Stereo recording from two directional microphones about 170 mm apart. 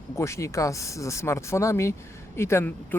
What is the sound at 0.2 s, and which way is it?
Speech, 15° left (ahead or behind).